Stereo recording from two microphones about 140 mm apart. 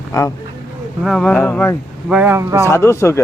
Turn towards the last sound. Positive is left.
turn(degrees=20)  # may be behind; listen again after turning